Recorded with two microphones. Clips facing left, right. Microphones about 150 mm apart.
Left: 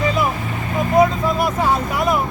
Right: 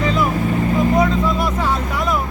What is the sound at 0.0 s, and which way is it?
Vehicle, 10° left (ahead or behind).